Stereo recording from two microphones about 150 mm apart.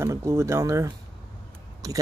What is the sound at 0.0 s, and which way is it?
Speech, 20° right (ahead or behind).